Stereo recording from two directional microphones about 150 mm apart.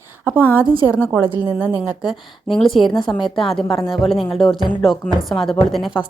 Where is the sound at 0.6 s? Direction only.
35° right (ahead or behind).